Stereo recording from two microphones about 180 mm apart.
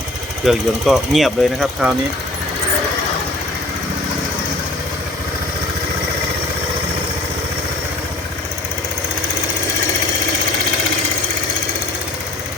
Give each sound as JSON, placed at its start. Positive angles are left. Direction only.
{"t": 0.4, "sound": "speech", "side_deg": 0}